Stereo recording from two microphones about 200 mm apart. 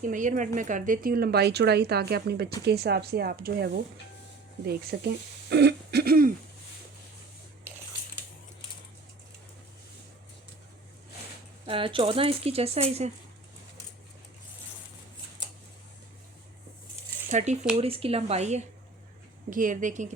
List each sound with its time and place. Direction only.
0.0 s speech: 40° right (ahead or behind)
11.6 s speech: 25° right (ahead or behind)
17.2 s a woman's voice: 35° right (ahead or behind)